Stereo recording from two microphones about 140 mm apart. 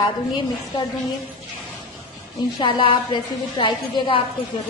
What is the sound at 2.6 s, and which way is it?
A woman's voice, 35° left (ahead or behind).